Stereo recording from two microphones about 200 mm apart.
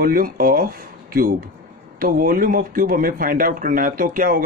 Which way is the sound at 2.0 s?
45° right (ahead or behind).